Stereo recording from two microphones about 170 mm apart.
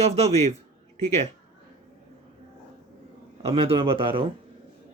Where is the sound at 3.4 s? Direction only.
35° right (ahead or behind).